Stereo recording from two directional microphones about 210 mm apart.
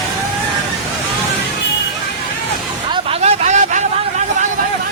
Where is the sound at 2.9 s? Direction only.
30° right (ahead or behind).